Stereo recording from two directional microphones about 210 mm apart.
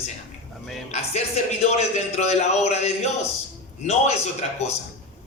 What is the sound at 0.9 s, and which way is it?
A man's voice, 30° left (ahead or behind).